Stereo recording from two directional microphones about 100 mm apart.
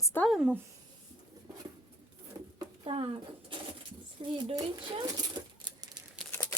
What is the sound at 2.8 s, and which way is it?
Speech, 65° right (ahead or behind).